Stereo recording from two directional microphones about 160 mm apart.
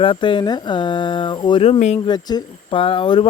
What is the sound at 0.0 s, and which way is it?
Speech, 30° left (ahead or behind).